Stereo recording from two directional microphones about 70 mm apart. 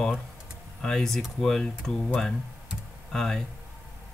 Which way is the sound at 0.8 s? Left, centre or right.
Centre.